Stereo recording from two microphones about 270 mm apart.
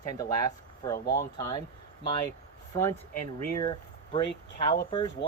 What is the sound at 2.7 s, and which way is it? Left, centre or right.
Speech, centre.